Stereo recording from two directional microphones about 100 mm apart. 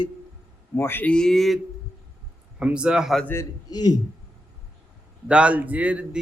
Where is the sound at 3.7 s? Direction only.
40° left (ahead or behind).